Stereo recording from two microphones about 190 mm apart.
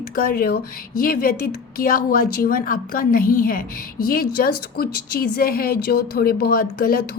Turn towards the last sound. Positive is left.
turn(degrees=50)  # may be behind; listen again after turning